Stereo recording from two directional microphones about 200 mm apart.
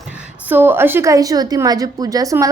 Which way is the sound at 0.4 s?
10° right (ahead or behind).